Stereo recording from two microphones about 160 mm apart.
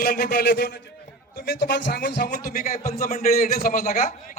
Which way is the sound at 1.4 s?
90° left.